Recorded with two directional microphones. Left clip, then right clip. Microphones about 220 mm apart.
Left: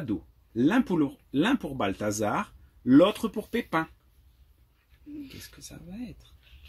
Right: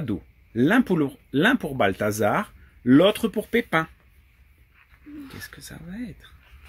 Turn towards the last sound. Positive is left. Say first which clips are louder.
# right 5 dB
turn(degrees=-35)  # may be behind; listen again after turning